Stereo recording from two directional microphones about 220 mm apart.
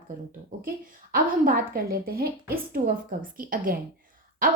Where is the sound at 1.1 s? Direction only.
40° right (ahead or behind).